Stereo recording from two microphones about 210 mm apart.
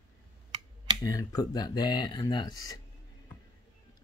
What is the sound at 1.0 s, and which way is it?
Speech, 20° left (ahead or behind).